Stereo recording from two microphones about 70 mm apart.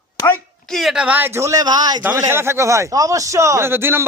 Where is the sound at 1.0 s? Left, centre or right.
Centre.